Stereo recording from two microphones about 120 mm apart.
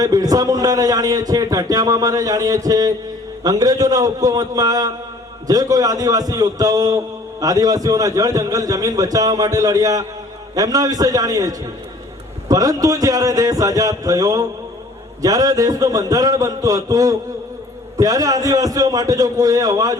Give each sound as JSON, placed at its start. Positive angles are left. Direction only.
{"t": 0.0, "sound": "a man's voice", "side_deg": -30}